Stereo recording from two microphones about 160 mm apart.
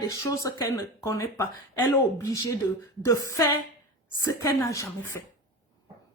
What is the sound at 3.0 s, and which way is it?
Speech, 20° left (ahead or behind).